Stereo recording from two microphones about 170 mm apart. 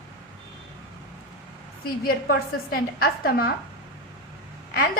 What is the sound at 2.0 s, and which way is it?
A woman's voice, 60° left (ahead or behind).